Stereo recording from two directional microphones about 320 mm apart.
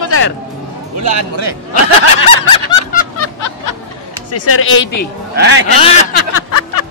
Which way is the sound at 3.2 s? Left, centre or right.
Left.